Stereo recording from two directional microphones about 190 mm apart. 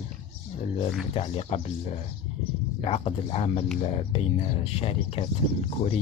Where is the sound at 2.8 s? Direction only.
30° left (ahead or behind).